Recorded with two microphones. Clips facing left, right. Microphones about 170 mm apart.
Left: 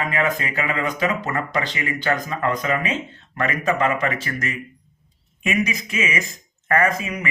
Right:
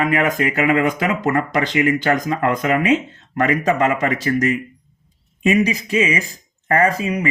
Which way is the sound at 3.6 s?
40° right (ahead or behind).